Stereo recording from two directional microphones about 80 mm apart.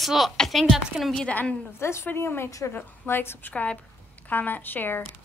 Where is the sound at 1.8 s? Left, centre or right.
Left.